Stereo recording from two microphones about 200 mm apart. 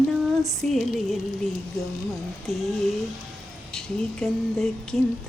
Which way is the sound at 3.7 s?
5° left (ahead or behind).